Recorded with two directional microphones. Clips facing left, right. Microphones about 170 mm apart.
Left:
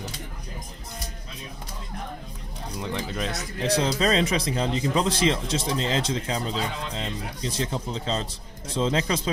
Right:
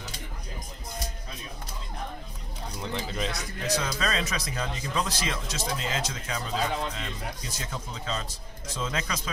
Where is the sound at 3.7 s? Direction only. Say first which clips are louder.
Left 6 dB; 30° left (ahead or behind).